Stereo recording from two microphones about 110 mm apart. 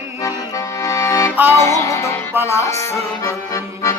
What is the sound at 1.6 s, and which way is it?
Music, 30° left (ahead or behind).